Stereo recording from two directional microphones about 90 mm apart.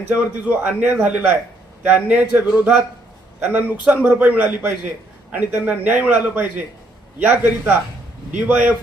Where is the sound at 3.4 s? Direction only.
15° right (ahead or behind).